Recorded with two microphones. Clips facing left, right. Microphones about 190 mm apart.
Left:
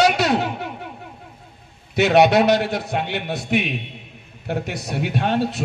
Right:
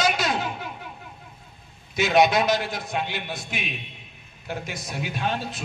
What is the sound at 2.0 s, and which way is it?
A man's voice, 65° left (ahead or behind).